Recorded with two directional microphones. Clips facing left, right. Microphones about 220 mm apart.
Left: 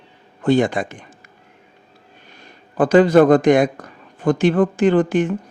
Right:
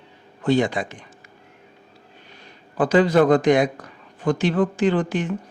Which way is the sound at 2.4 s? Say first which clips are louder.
Left 4 dB; 50° left (ahead or behind).